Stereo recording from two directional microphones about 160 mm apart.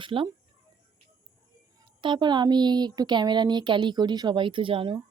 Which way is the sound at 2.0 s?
30° right (ahead or behind).